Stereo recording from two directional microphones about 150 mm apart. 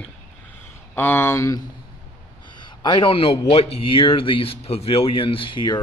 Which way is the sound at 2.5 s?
30° left (ahead or behind).